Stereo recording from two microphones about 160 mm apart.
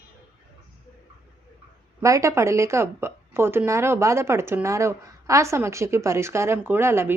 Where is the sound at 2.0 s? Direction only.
20° right (ahead or behind).